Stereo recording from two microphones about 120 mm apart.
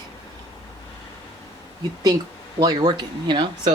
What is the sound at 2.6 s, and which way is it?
Speech, 35° right (ahead or behind).